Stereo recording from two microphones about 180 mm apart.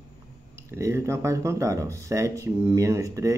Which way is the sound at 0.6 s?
15° right (ahead or behind).